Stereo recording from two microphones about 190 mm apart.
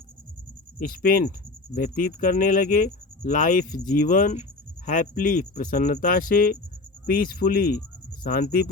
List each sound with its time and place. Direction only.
0.9 s speech: 50° left (ahead or behind)